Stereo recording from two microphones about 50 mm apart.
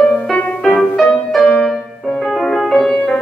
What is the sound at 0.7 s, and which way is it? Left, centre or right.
Music, centre.